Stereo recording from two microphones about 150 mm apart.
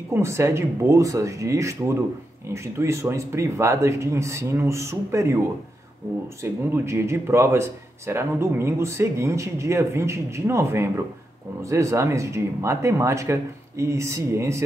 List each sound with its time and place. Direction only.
0.1 s speech: 20° right (ahead or behind)
6.4 s speech: 15° right (ahead or behind)